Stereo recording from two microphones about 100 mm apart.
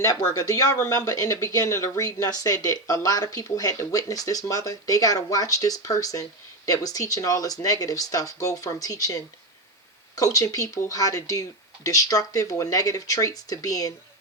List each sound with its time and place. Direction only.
0.3 s speech: 35° left (ahead or behind)